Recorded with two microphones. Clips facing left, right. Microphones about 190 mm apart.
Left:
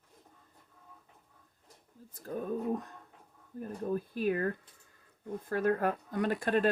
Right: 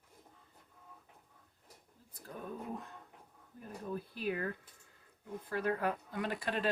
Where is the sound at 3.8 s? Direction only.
45° left (ahead or behind).